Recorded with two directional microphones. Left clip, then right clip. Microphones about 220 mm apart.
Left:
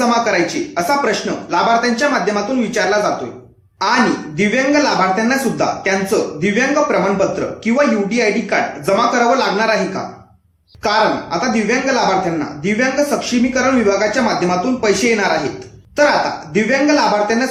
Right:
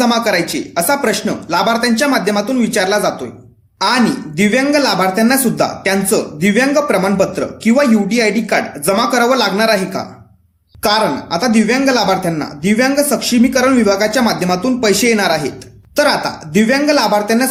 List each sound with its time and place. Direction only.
0.0 s speech: 50° right (ahead or behind)